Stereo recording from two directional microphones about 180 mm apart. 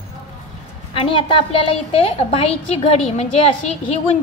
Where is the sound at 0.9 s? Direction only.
30° left (ahead or behind).